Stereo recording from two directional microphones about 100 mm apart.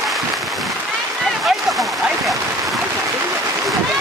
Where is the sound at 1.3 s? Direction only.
Centre (ahead or behind).